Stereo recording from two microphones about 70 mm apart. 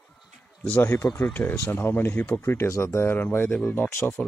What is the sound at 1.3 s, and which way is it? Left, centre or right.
Speech, left.